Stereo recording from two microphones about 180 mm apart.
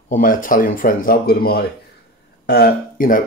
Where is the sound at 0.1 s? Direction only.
50° left (ahead or behind).